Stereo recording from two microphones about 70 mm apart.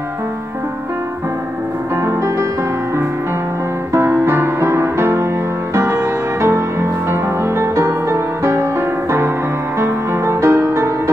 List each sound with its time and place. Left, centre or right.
2.0 s music: right
3.9 s music: right
9.8 s music: right